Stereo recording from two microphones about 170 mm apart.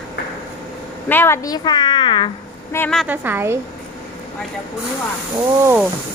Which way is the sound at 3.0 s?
10° right (ahead or behind).